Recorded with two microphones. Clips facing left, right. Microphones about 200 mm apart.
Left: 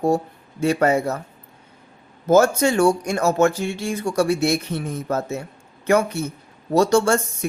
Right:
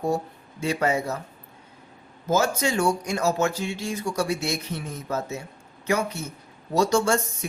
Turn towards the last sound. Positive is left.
turn(degrees=55)  # may be behind; listen again after turning